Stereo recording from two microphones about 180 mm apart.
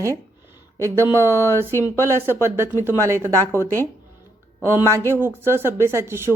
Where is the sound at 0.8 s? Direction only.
15° right (ahead or behind).